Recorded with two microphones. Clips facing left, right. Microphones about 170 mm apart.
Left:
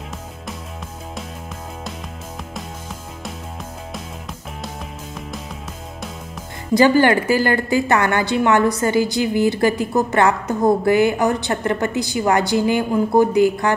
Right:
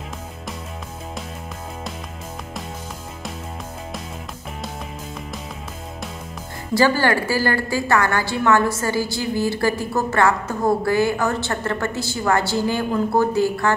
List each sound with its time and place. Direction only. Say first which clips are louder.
6.7 s a woman's voice: left 4 dB; 20° left (ahead or behind)